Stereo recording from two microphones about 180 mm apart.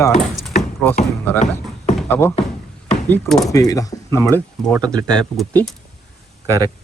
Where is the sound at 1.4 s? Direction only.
40° left (ahead or behind).